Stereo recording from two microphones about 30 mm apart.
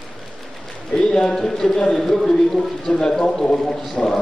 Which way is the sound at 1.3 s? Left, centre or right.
Centre.